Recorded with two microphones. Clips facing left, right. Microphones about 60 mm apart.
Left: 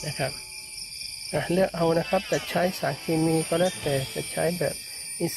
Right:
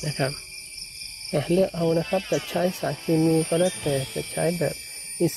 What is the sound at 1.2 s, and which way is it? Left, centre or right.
Speech, left.